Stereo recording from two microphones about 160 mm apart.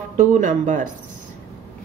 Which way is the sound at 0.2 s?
50° right (ahead or behind).